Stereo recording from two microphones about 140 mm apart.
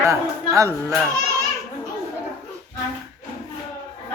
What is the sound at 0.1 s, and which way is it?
Speech, 25° right (ahead or behind).